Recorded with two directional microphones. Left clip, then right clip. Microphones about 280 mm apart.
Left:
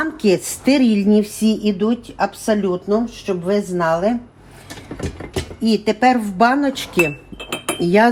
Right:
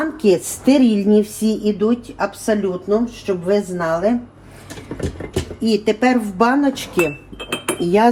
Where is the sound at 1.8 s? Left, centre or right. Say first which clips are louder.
Even; left.